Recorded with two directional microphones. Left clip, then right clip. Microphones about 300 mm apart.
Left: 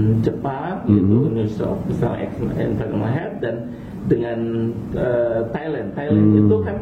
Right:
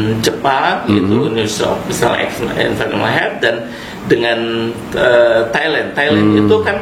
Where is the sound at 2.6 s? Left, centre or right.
Centre.